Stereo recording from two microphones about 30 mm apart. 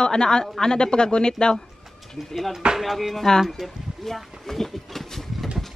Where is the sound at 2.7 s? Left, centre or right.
Centre.